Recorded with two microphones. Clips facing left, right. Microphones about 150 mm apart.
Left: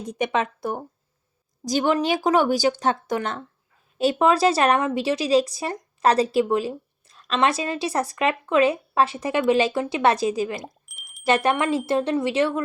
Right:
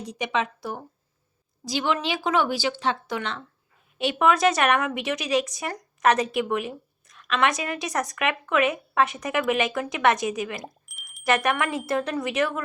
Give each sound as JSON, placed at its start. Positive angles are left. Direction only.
{"t": 0.0, "sound": "speech", "side_deg": 50}
{"t": 3.9, "sound": "speech", "side_deg": 35}
{"t": 10.6, "sound": "a sound", "side_deg": 0}
{"t": 11.3, "sound": "speech", "side_deg": 30}